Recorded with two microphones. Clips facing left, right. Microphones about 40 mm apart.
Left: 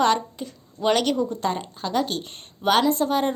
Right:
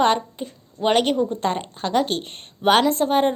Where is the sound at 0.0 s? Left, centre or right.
Right.